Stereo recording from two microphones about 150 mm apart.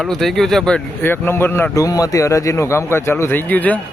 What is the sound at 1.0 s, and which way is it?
A man's voice, 15° left (ahead or behind).